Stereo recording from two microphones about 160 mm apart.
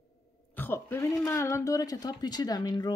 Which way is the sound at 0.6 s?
15° left (ahead or behind).